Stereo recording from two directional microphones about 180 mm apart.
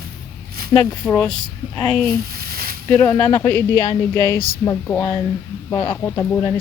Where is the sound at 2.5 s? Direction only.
55° right (ahead or behind).